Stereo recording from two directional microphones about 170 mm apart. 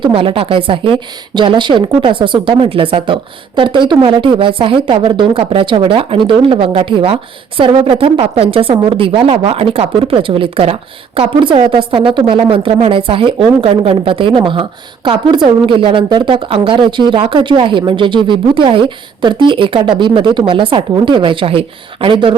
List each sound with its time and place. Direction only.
0.0 s a woman's voice: 30° right (ahead or behind)